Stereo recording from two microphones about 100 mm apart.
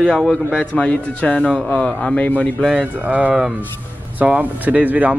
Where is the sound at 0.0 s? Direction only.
5° left (ahead or behind).